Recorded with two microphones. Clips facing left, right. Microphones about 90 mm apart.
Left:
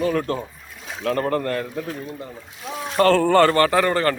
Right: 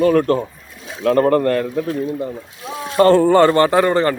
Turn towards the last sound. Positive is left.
turn(degrees=-20)  # may be behind; listen again after turning